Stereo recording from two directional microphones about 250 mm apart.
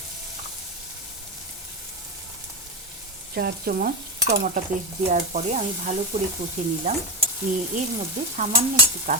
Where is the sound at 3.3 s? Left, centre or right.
Right.